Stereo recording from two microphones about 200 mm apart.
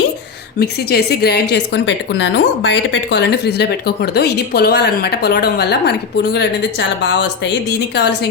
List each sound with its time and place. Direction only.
0.6 s a woman's voice: 55° left (ahead or behind)